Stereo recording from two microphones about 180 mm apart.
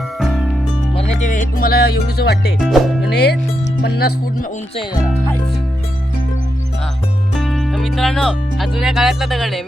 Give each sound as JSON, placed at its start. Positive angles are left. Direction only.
{"t": 0.2, "sound": "music", "side_deg": 0}
{"t": 1.2, "sound": "music", "side_deg": 45}
{"t": 2.6, "sound": "speech", "side_deg": 0}
{"t": 3.1, "sound": "speech", "side_deg": 65}
{"t": 7.3, "sound": "speech", "side_deg": 0}